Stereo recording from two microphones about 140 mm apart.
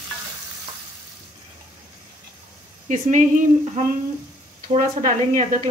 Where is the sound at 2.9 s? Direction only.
60° right (ahead or behind).